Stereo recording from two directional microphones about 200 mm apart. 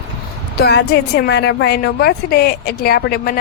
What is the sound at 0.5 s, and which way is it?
Speech, 55° left (ahead or behind).